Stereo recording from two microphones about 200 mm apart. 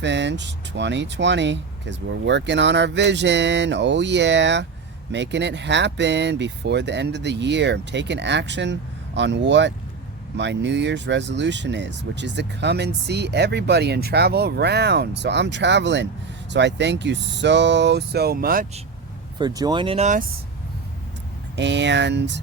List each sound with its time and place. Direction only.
0.0 s speech: 60° right (ahead or behind)
19.4 s speech: 20° right (ahead or behind); by 20.2 s 35° right (ahead or behind)
21.5 s speech: 60° right (ahead or behind)